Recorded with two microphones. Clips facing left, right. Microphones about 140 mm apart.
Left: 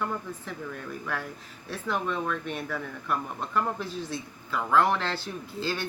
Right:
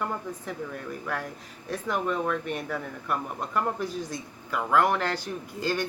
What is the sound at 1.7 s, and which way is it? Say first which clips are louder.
Speech: right 2 dB; 10° right (ahead or behind).